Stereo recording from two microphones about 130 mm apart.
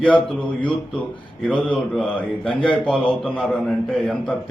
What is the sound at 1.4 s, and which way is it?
A man's voice, 10° left (ahead or behind).